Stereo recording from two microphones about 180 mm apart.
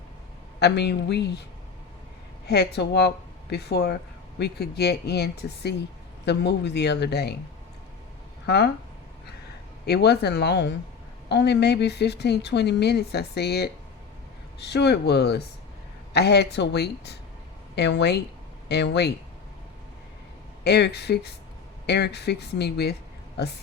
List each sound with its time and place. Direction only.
0.6 s a woman's voice: 70° left (ahead or behind)
2.5 s a woman's voice: 65° left (ahead or behind)
8.4 s speech: 65° left (ahead or behind)
9.8 s a woman's voice: 65° left (ahead or behind)
20.7 s a woman's voice: 70° left (ahead or behind)